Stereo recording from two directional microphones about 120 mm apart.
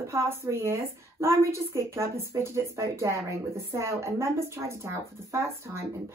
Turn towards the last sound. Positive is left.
turn(degrees=-25)  # may be behind; listen again after turning